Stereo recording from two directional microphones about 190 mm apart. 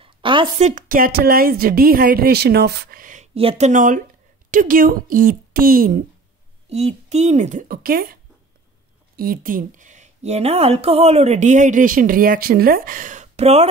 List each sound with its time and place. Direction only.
0.0 s a woman's voice: 25° right (ahead or behind); by 3.3 s 45° right (ahead or behind)
3.3 s a woman's voice: 30° right (ahead or behind); by 6.0 s 45° right (ahead or behind)
6.7 s speech: 35° right (ahead or behind)